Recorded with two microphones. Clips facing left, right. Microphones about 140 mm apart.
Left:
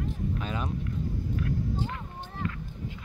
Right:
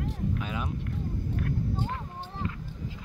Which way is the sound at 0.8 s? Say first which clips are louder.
Left 1 dB; 55° right (ahead or behind).